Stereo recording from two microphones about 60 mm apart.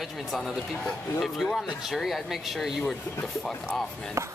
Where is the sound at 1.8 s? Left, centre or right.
Centre.